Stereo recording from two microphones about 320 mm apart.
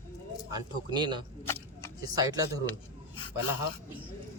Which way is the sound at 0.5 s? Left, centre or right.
Centre.